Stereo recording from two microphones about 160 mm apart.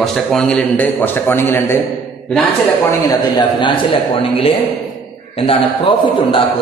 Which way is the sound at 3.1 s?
25° left (ahead or behind).